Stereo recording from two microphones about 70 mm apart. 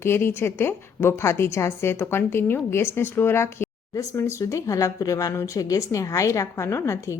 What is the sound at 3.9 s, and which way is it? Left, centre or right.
Speech, left.